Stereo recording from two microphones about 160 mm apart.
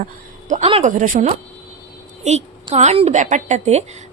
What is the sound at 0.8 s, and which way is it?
Speech, 50° right (ahead or behind).